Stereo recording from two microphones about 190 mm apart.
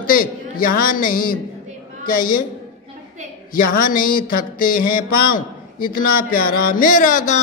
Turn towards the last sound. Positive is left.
turn(degrees=40)  # may be behind; listen again after turning